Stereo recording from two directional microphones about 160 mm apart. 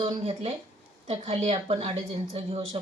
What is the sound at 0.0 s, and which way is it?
A woman's voice, 40° right (ahead or behind).